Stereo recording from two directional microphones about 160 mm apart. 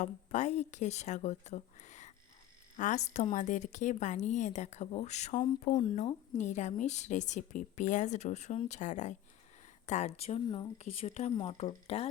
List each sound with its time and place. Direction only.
0.0 s a woman's voice: 50° left (ahead or behind)